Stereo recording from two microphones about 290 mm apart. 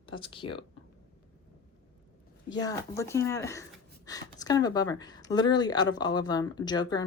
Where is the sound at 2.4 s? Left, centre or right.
Centre.